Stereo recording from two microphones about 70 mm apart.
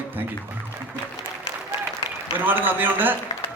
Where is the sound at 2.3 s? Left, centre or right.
Right.